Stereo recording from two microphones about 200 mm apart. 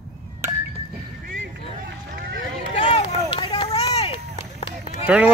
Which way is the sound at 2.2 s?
50° right (ahead or behind).